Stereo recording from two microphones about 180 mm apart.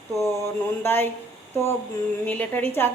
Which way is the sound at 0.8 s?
10° left (ahead or behind).